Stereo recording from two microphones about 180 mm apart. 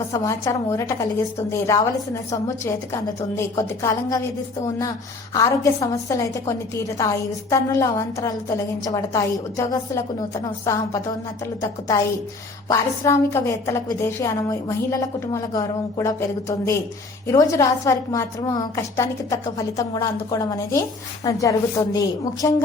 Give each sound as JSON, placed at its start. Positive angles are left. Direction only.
{"t": 0.1, "sound": "a woman's voice", "side_deg": 20}
{"t": 5.3, "sound": "a woman's voice", "side_deg": 20}
{"t": 12.6, "sound": "a woman's voice", "side_deg": 15}